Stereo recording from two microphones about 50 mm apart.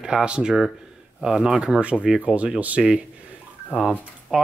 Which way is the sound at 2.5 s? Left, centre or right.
Right.